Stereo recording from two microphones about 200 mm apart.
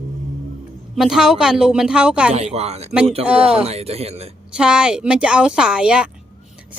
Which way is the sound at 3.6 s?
30° right (ahead or behind).